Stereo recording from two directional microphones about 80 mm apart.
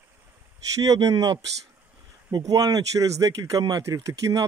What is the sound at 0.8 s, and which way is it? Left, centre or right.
Speech, right.